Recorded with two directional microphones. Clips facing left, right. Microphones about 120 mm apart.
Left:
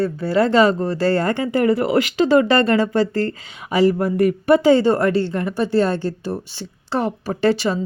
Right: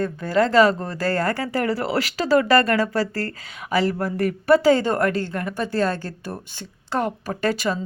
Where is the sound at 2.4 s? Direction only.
15° left (ahead or behind).